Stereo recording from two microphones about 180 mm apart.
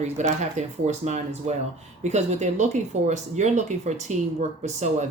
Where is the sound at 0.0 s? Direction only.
40° right (ahead or behind).